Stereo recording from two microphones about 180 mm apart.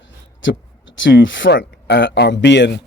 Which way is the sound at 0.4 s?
90° left.